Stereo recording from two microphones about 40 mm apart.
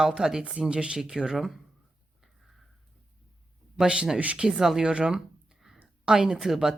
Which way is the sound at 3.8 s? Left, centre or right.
Right.